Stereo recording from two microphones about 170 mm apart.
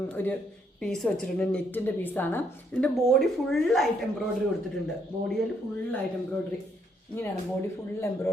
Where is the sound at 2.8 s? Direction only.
Centre (ahead or behind).